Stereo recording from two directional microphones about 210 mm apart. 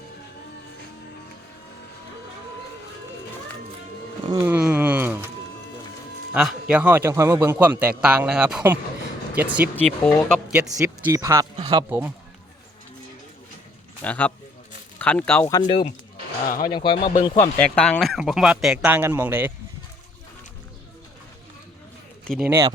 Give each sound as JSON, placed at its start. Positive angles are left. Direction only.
{"t": 4.4, "sound": "a sound", "side_deg": -5}
{"t": 6.3, "sound": "a man's voice", "side_deg": -5}
{"t": 10.0, "sound": "speech", "side_deg": 10}
{"t": 10.8, "sound": "a man's voice", "side_deg": -15}
{"t": 11.9, "sound": "a man's voice", "side_deg": -5}
{"t": 14.0, "sound": "speech", "side_deg": 5}
{"t": 16.5, "sound": "speech", "side_deg": 45}
{"t": 16.7, "sound": "speech", "side_deg": 25}
{"t": 17.3, "sound": "speech", "side_deg": 10}
{"t": 22.2, "sound": "a man's voice", "side_deg": 5}
{"t": 22.4, "sound": "a man's voice", "side_deg": -10}